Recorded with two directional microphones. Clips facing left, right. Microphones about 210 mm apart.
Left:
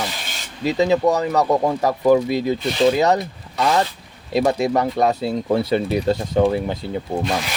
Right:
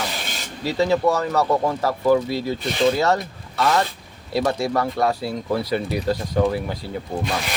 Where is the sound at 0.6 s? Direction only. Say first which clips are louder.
Left 2 dB; 15° left (ahead or behind).